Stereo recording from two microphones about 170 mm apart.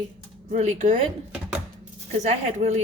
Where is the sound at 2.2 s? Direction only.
45° right (ahead or behind).